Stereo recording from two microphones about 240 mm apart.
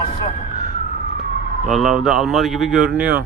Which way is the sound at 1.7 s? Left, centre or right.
Centre.